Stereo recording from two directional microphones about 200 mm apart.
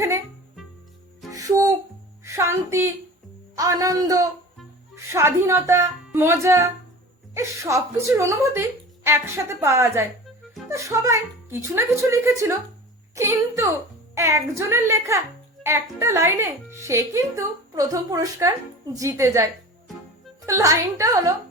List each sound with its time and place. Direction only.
1.3 s music: 15° right (ahead or behind)
3.6 s speech: 15° right (ahead or behind)